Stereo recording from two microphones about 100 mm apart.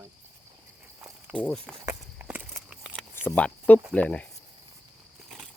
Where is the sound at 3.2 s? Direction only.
15° left (ahead or behind).